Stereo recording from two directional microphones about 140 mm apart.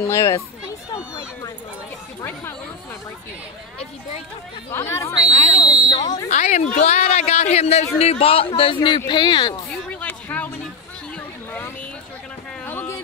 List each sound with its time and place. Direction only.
0.0 s speech: 20° left (ahead or behind)
4.6 s speech: 20° left (ahead or behind)
5.4 s speech: 30° left (ahead or behind)
6.2 s speech: 55° left (ahead or behind); by 9.6 s 30° left (ahead or behind)
9.8 s a sound: 10° left (ahead or behind)
12.6 s a sound: 15° left (ahead or behind)